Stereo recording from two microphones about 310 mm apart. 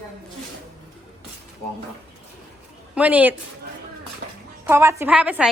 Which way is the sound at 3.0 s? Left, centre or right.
Centre.